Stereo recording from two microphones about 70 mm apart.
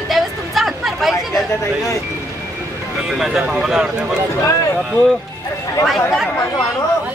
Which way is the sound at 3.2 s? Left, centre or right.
Centre.